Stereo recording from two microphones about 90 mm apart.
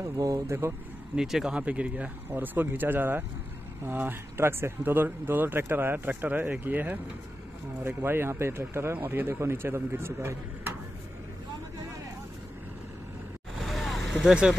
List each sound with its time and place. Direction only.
0.0 s speech: 35° right (ahead or behind)
1.1 s speech: 5° right (ahead or behind); by 10.7 s 25° right (ahead or behind)
13.6 s vehicle: centre (ahead or behind)